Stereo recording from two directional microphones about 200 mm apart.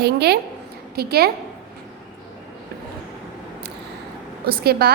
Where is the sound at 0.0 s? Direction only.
55° right (ahead or behind).